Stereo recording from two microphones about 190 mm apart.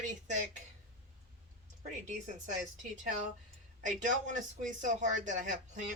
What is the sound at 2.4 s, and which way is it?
Speech, 40° right (ahead or behind).